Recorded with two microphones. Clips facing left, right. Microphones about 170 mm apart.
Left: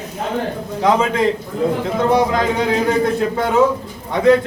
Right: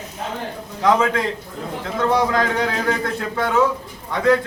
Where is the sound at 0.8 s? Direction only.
20° left (ahead or behind).